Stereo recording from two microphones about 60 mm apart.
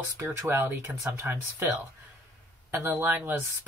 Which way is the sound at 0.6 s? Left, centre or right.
Right.